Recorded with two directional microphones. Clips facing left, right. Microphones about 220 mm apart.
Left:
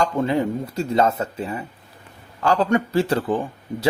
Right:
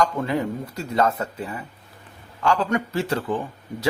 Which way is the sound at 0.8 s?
25° left (ahead or behind).